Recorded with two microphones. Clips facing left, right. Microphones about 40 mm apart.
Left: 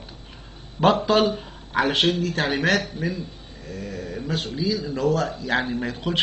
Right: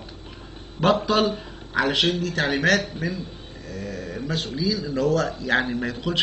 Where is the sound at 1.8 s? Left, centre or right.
Left.